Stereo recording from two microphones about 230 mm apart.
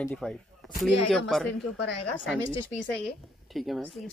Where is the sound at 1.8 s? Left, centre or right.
Left.